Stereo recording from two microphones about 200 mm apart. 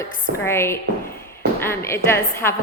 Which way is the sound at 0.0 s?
10° left (ahead or behind).